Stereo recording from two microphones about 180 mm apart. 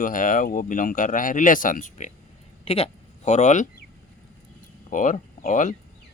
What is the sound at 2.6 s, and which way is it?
Speech, 35° left (ahead or behind).